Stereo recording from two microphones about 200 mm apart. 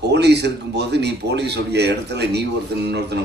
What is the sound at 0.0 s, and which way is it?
A man's voice, 55° right (ahead or behind).